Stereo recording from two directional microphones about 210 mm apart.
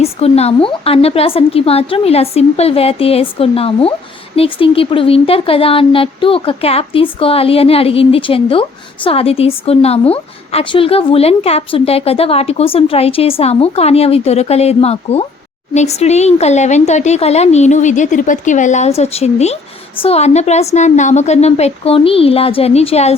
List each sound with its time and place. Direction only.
0.0 s a woman's voice: 30° left (ahead or behind)